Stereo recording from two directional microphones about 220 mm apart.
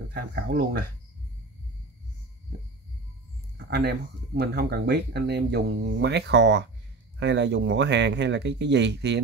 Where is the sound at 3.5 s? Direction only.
50° right (ahead or behind).